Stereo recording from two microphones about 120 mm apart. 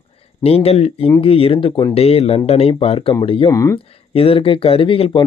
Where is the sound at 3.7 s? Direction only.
50° left (ahead or behind).